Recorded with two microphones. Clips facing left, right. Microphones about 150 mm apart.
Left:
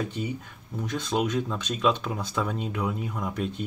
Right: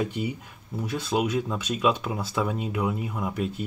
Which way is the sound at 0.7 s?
10° right (ahead or behind).